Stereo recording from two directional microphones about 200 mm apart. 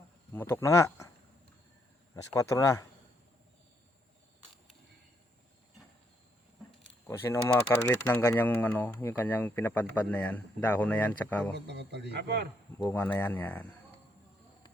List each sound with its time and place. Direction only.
0.3 s speech: 10° left (ahead or behind)
2.3 s speech: 15° left (ahead or behind)
7.1 s speech: 15° left (ahead or behind)
11.5 s a man's voice: 60° right (ahead or behind)
12.8 s speech: 10° left (ahead or behind)